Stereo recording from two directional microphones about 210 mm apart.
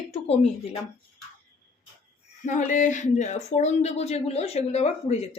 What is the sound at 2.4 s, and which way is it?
Speech, 35° left (ahead or behind).